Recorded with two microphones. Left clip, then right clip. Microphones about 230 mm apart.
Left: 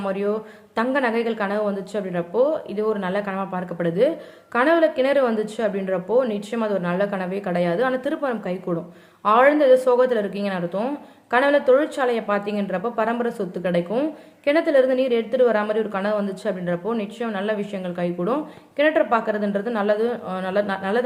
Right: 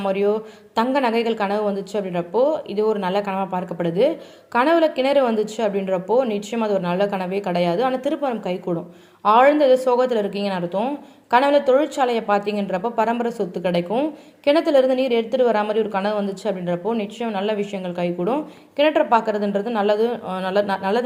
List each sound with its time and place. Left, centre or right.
0.0 s a woman's voice: centre